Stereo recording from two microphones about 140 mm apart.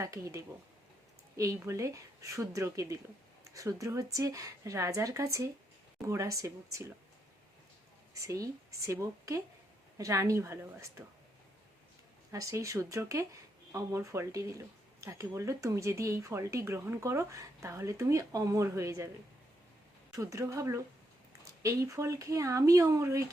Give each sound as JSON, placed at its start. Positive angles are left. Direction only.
{"t": 0.0, "sound": "speech", "side_deg": -20}
{"t": 1.5, "sound": "speech", "side_deg": -20}
{"t": 8.1, "sound": "speech", "side_deg": -20}
{"t": 12.3, "sound": "speech", "side_deg": -20}
{"t": 20.1, "sound": "speech", "side_deg": -20}